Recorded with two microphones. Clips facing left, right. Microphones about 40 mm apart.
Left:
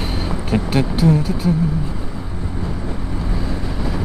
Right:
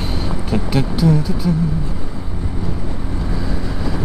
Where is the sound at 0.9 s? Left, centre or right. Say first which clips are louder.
Right 1 dB; left.